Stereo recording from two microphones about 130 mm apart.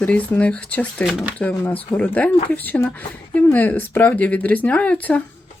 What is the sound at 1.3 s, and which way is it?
Speech, 10° left (ahead or behind).